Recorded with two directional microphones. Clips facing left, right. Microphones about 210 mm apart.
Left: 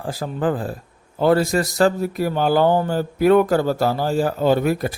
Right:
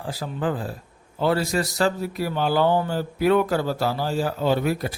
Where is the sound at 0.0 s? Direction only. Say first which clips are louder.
Left 4 dB; 45° left (ahead or behind).